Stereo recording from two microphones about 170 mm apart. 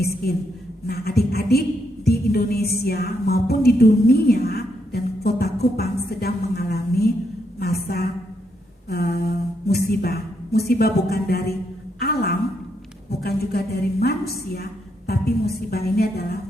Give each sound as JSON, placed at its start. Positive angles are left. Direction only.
{"t": 0.0, "sound": "speech", "side_deg": 65}
{"t": 2.0, "sound": "music", "side_deg": 65}
{"t": 7.6, "sound": "a woman's voice", "side_deg": 65}